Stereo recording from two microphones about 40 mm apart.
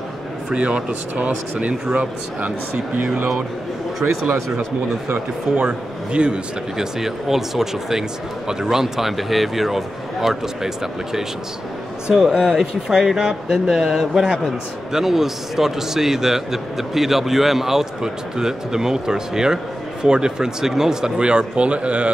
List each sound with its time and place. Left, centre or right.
0.5 s speech: right
5.6 s a man's voice: right
6.8 s a man's voice: centre; by 22.1 s right